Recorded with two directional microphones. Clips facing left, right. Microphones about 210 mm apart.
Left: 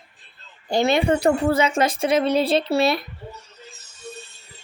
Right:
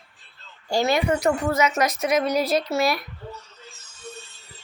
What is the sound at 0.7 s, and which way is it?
A woman's voice, 25° left (ahead or behind).